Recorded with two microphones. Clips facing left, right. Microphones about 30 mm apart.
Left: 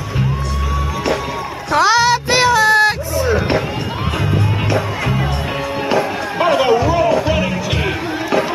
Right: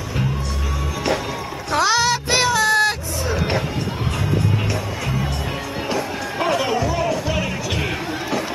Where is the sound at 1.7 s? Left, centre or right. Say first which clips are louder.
Left 5 dB; centre.